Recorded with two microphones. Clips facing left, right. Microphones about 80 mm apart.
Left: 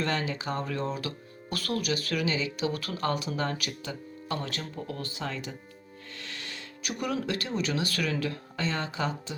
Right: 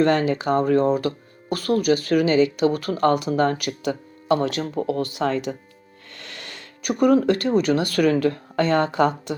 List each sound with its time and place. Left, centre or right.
0.0 s speech: right
5.1 s speech: right
6.1 s music: right
6.9 s speech: right